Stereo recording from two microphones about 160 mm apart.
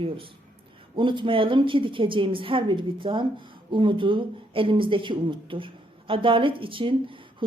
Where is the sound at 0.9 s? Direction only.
30° right (ahead or behind).